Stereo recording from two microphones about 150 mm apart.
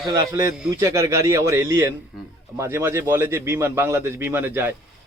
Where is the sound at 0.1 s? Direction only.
25° right (ahead or behind).